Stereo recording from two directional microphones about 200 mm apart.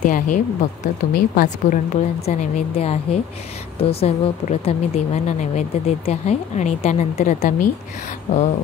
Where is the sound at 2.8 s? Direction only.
30° left (ahead or behind).